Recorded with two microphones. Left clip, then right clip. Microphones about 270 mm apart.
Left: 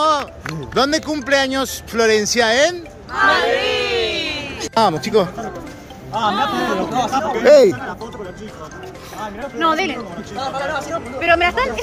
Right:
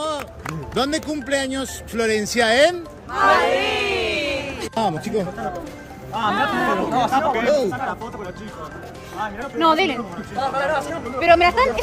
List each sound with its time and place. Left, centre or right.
0.0 s music: centre
0.7 s speech: centre
3.2 s speech: right
4.7 s speech: centre
7.4 s speech: centre
9.6 s speech: right
10.4 s speech: centre
11.1 s speech: right